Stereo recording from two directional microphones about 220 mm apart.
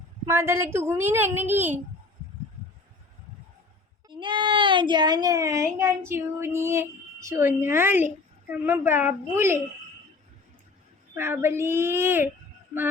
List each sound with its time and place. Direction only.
0.3 s speech: 10° right (ahead or behind)
4.1 s speech: 20° right (ahead or behind)
11.1 s speech: 10° right (ahead or behind)